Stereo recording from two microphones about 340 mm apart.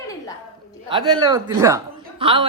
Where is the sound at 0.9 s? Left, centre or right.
Centre.